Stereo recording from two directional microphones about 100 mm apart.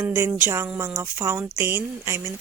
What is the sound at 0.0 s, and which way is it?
Speech, 25° right (ahead or behind).